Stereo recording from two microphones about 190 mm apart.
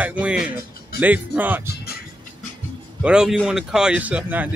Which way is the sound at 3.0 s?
5° right (ahead or behind).